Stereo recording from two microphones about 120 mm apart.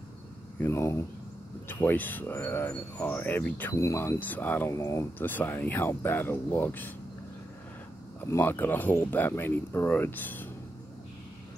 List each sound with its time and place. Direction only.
0.6 s speech: 20° left (ahead or behind)
8.2 s speech: 15° left (ahead or behind)